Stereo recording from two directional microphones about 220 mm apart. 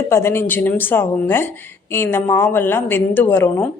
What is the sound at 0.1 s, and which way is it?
A woman's voice, 10° left (ahead or behind).